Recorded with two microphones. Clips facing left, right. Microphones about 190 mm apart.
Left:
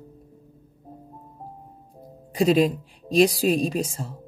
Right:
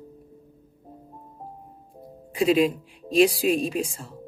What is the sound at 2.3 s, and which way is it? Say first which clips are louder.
Speech: left 1 dB; 35° left (ahead or behind).